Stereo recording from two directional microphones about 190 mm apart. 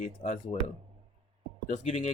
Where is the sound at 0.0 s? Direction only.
40° left (ahead or behind).